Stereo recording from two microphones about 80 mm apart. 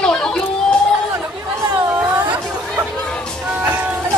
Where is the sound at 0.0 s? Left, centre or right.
Centre.